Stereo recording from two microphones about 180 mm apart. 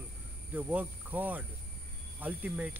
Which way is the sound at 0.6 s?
10° right (ahead or behind).